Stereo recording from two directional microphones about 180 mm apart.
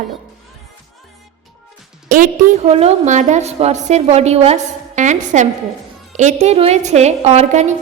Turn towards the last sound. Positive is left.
turn(degrees=-40)  # may be behind; listen again after turning